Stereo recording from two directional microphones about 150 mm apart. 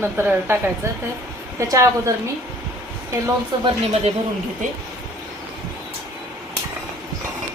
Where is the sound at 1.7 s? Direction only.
20° right (ahead or behind).